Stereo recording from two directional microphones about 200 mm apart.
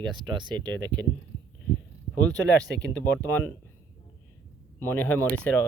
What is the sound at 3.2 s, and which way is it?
Speech, 10° left (ahead or behind).